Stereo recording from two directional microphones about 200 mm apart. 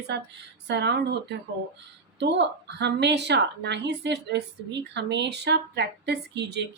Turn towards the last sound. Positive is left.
turn(degrees=-60)  # may be behind; listen again after turning